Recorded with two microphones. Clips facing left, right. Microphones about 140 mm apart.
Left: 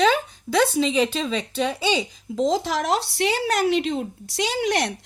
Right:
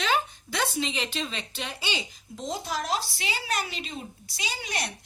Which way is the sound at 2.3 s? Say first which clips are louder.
Left 10 dB; 90° left.